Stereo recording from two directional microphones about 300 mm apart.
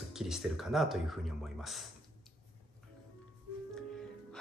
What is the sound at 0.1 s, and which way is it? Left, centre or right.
Speech, centre.